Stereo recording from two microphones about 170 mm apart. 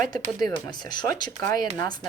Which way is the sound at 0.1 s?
25° left (ahead or behind).